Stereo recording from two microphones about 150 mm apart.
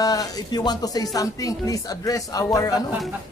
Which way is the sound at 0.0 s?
25° left (ahead or behind).